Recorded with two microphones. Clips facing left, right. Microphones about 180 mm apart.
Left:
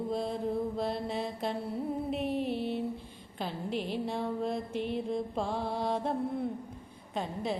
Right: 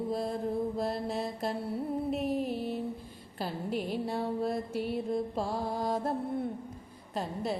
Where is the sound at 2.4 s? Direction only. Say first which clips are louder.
Left 1 dB; 40° right (ahead or behind).